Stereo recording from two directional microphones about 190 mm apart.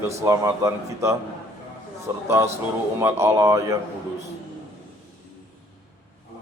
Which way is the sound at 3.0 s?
15° right (ahead or behind).